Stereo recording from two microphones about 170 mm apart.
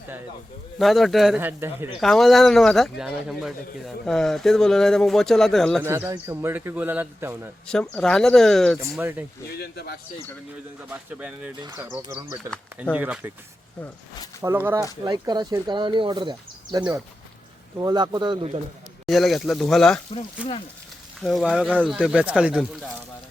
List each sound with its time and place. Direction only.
0.8 s speech: centre (ahead or behind)
1.4 s a man's voice: 15° right (ahead or behind)
2.0 s speech: centre (ahead or behind)
5.8 s a man's voice: 15° right (ahead or behind)
7.7 s speech: 5° left (ahead or behind)
9.0 s a man's voice: 10° right (ahead or behind)
9.5 s speech: 70° left (ahead or behind)
10.8 s a man's voice: 10° right (ahead or behind)
14.4 s a man's voice: 15° right (ahead or behind)
15.0 s speech: 25° right (ahead or behind)
19.0 s a man's voice: centre (ahead or behind)
21.9 s a man's voice: 5° right (ahead or behind)